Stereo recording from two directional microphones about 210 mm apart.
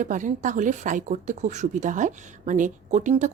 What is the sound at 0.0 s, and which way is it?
A woman's voice, 35° right (ahead or behind).